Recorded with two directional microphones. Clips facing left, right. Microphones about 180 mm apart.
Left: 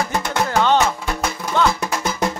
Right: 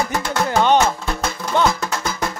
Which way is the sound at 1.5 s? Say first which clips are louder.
Right 1 dB; 15° right (ahead or behind).